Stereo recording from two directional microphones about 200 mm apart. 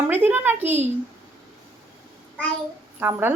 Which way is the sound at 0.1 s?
10° right (ahead or behind).